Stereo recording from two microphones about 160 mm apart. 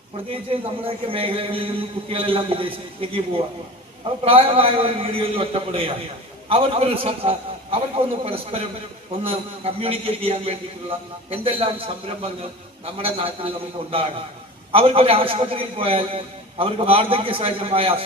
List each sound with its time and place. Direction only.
0.3 s a man's voice: 35° right (ahead or behind)